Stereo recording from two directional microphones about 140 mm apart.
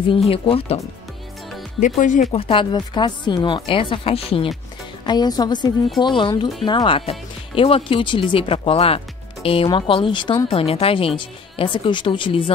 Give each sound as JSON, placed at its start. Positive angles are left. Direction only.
{"t": 0.3, "sound": "speech", "side_deg": 45}
{"t": 2.0, "sound": "speech", "side_deg": 65}
{"t": 2.3, "sound": "speech", "side_deg": 40}
{"t": 5.0, "sound": "speech", "side_deg": 30}